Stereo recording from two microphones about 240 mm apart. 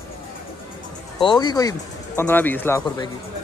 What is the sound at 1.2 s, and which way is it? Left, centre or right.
Speech, centre.